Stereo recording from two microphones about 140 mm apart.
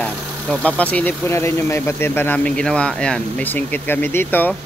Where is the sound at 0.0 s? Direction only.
5° left (ahead or behind).